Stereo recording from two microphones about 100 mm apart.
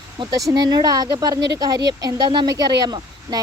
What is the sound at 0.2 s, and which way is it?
A woman's voice, 55° right (ahead or behind).